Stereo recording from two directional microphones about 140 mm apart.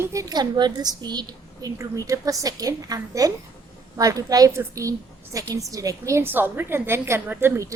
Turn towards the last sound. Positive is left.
turn(degrees=-20)  # may be behind; listen again after turning